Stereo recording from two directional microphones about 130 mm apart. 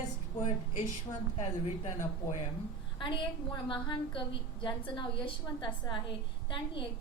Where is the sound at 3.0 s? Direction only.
40° left (ahead or behind).